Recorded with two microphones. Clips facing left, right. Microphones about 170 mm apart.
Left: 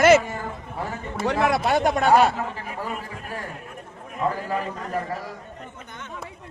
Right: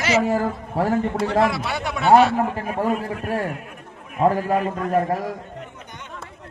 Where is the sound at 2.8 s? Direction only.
65° right (ahead or behind).